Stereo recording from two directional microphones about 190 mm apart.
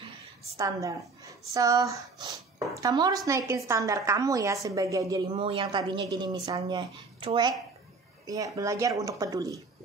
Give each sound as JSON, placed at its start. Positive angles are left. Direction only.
{"t": 0.6, "sound": "a woman's voice", "side_deg": -15}